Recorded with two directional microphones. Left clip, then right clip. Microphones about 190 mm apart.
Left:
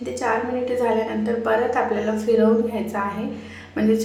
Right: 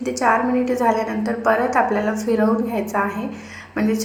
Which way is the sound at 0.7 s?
15° right (ahead or behind).